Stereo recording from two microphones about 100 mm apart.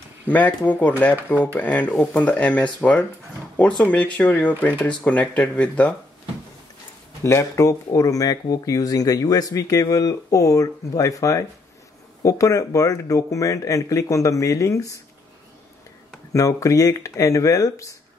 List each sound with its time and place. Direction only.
0.3 s speech: 15° left (ahead or behind)
7.2 s speech: 30° left (ahead or behind)
16.3 s speech: 30° left (ahead or behind)